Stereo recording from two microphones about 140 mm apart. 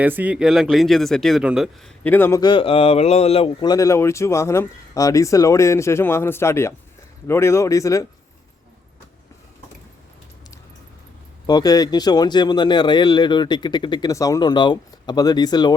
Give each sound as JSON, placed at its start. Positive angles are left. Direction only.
{"t": 0.0, "sound": "speech", "side_deg": -10}
{"t": 2.0, "sound": "a man's voice", "side_deg": 15}
{"t": 2.4, "sound": "a man's voice", "side_deg": 35}
{"t": 3.7, "sound": "speech", "side_deg": 25}
{"t": 11.4, "sound": "speech", "side_deg": 25}